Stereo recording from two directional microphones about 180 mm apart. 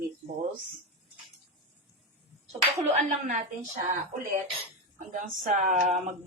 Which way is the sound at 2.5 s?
40° right (ahead or behind).